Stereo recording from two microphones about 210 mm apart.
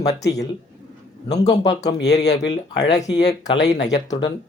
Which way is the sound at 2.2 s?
55° left (ahead or behind).